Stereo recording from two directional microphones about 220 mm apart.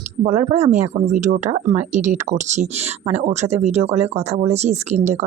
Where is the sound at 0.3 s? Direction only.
30° right (ahead or behind).